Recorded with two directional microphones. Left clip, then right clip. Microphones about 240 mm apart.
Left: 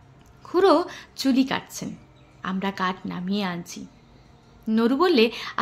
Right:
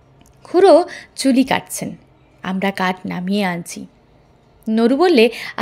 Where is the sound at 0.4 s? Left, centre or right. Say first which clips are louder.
Right 8 dB; right.